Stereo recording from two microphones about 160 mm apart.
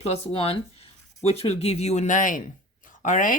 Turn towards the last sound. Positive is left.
turn(degrees=55)  # may be behind; listen again after turning